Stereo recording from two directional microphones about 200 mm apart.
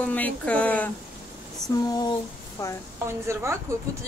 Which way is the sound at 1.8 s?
20° left (ahead or behind).